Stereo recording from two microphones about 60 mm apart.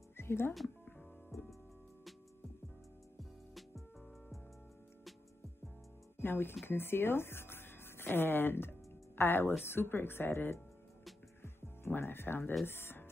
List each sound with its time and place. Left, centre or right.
0.2 s speech: left
1.3 s music: left
3.2 s music: centre
6.2 s speech: left
11.4 s music: left
12.6 s speech: left